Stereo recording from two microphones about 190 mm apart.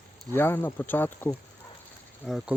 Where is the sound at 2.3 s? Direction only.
Centre (ahead or behind).